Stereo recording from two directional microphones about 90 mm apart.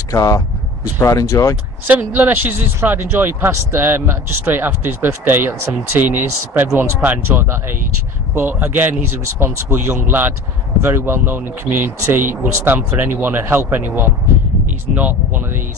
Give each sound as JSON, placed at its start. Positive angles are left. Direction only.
{"t": 0.1, "sound": "speech", "side_deg": 40}
{"t": 1.9, "sound": "speech", "side_deg": -20}